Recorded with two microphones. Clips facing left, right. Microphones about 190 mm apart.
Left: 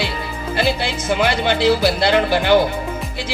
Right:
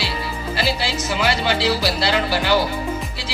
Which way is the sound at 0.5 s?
55° left (ahead or behind).